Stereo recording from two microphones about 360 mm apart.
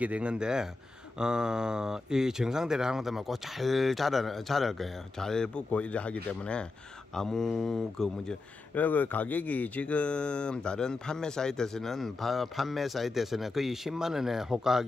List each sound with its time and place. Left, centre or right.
0.0 s speech: centre